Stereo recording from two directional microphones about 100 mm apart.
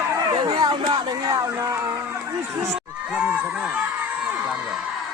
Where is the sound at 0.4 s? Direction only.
45° right (ahead or behind).